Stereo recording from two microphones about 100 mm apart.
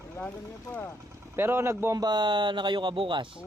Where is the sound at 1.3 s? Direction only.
25° right (ahead or behind).